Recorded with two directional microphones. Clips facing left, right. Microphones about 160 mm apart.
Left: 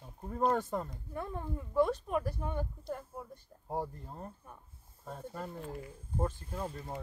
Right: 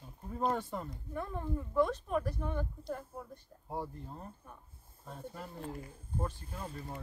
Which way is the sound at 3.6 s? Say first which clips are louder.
Left 3 dB; 40° left (ahead or behind).